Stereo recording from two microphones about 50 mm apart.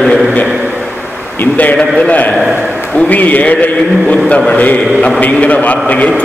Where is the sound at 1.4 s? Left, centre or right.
Left.